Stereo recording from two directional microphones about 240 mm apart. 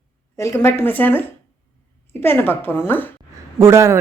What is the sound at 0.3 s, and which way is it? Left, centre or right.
Speech, centre.